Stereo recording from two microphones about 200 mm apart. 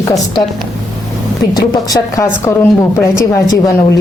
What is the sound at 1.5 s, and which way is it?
A woman's voice, 20° left (ahead or behind).